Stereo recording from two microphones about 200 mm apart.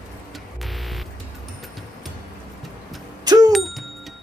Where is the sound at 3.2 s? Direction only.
20° right (ahead or behind).